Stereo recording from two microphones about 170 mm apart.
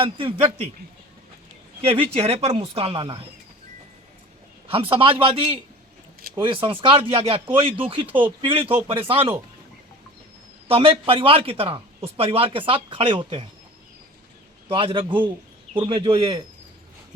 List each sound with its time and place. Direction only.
0.0 s speech: 35° right (ahead or behind)
1.8 s speech: 35° right (ahead or behind)
4.7 s speech: 35° right (ahead or behind)
10.7 s speech: 35° right (ahead or behind)
14.7 s speech: 35° right (ahead or behind)